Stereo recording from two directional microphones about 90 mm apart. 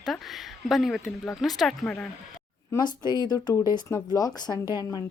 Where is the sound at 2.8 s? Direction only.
50° left (ahead or behind).